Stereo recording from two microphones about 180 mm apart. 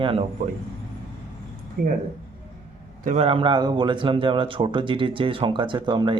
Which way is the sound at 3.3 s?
30° right (ahead or behind).